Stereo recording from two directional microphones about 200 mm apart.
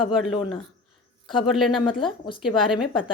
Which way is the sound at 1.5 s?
Centre (ahead or behind).